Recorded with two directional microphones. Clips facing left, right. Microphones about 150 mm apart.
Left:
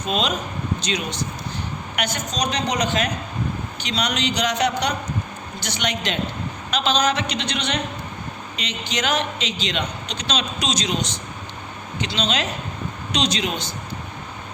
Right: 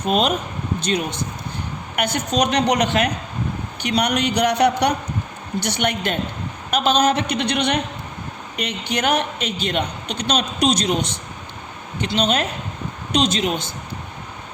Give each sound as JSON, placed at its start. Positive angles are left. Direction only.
{"t": 0.0, "sound": "a woman's voice", "side_deg": -55}